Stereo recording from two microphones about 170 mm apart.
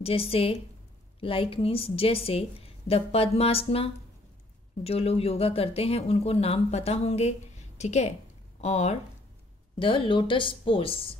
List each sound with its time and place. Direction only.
0.0 s speech: 35° left (ahead or behind)
9.8 s a woman's voice: 30° left (ahead or behind)